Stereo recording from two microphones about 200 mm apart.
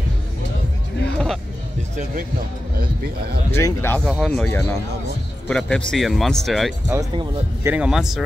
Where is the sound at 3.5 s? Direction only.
15° left (ahead or behind).